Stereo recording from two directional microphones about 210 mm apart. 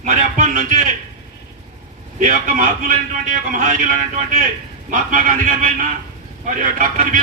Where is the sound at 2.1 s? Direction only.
40° right (ahead or behind).